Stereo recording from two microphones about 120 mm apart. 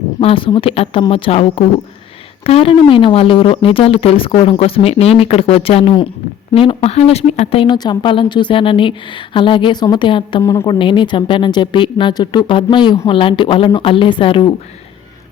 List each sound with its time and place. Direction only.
0.2 s speech: 50° left (ahead or behind)
10.4 s a woman's voice: 25° left (ahead or behind)
10.7 s speech: 45° left (ahead or behind)